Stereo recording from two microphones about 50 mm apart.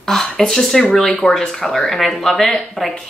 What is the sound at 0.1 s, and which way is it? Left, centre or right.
A woman's voice, centre.